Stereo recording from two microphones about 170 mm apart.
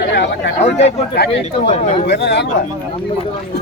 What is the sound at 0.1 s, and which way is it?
Chatter, 90° left.